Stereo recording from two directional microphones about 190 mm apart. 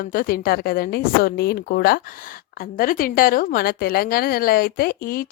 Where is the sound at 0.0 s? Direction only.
50° left (ahead or behind).